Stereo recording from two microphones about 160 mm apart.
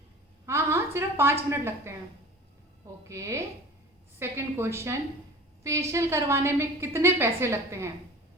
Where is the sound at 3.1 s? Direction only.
20° right (ahead or behind).